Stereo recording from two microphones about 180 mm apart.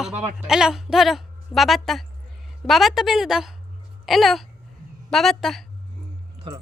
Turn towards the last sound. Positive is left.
turn(degrees=0)  # may be behind; listen again after turning